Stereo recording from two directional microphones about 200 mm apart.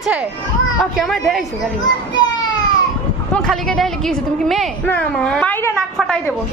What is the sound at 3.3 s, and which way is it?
A woman's voice, 5° left (ahead or behind).